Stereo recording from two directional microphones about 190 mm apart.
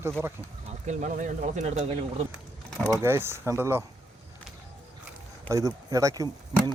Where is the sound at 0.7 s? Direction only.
40° right (ahead or behind).